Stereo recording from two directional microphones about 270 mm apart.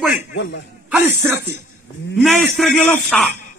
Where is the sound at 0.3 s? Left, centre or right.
Left.